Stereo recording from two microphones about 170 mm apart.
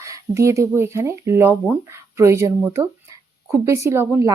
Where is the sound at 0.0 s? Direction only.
20° right (ahead or behind).